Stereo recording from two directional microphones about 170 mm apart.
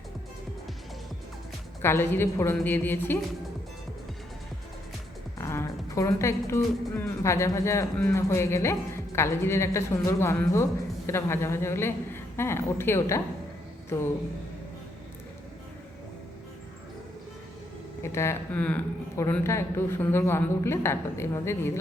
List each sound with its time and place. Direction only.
1.8 s a woman's voice: 15° left (ahead or behind)
5.4 s a woman's voice: 15° left (ahead or behind)
18.0 s a woman's voice: 15° left (ahead or behind)